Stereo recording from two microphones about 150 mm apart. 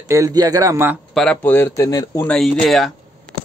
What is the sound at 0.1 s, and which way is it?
Speech, 25° right (ahead or behind).